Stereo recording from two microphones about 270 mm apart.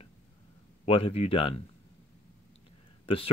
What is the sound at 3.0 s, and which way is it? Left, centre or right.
Speech, centre.